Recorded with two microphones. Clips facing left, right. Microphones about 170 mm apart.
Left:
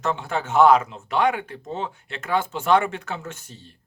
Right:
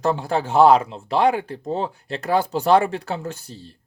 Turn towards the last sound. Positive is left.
turn(degrees=-35)  # may be behind; listen again after turning